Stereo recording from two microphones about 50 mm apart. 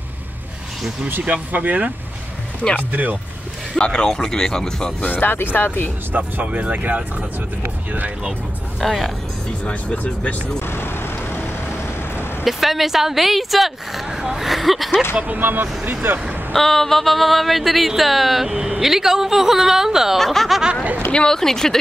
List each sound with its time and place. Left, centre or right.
1.2 s speech: right
2.9 s speech: right
3.7 s speech: centre
5.0 s speech: left
6.1 s speech: right
8.8 s speech: centre
9.7 s speech: left
10.7 s vehicle: left
12.4 s speech: centre
15.2 s speech: right
16.5 s speech: centre
20.2 s speech: centre
21.1 s speech: centre